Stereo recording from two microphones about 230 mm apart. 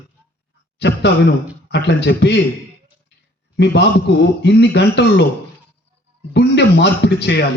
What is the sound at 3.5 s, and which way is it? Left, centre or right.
A man's voice, left.